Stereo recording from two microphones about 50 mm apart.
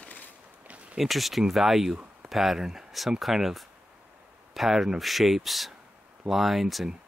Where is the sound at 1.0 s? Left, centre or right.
Centre.